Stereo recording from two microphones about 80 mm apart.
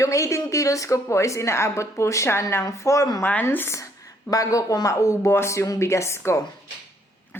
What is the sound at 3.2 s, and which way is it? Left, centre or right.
Speech, left.